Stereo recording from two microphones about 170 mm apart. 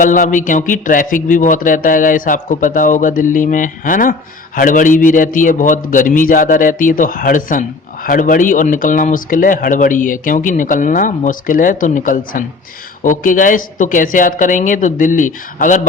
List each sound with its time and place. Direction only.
0.0 s speech: 50° left (ahead or behind)